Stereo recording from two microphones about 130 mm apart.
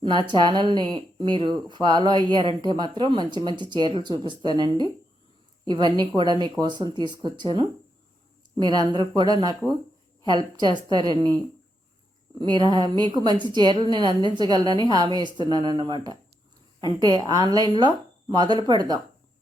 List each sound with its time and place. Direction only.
0.0 s a woman's voice: 35° right (ahead or behind)
12.4 s a woman's voice: 35° right (ahead or behind)